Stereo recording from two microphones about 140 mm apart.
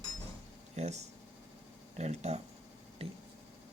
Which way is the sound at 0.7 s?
55° right (ahead or behind).